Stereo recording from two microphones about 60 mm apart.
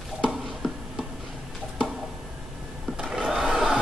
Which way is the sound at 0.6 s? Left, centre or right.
Centre.